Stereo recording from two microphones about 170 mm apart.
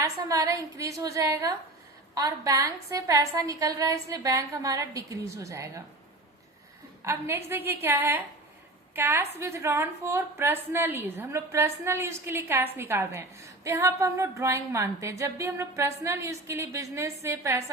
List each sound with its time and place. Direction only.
0.0 s a woman's voice: 20° right (ahead or behind)
7.0 s a woman's voice: 15° right (ahead or behind)